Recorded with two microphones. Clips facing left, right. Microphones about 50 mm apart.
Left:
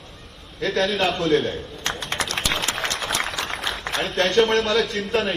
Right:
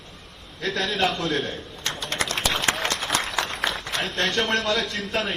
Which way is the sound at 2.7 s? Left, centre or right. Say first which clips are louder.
Right 3 dB; right.